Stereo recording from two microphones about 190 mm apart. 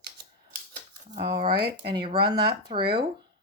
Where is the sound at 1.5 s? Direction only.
55° right (ahead or behind).